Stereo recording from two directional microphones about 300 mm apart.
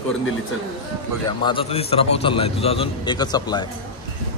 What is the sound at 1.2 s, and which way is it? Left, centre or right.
A man's voice, centre.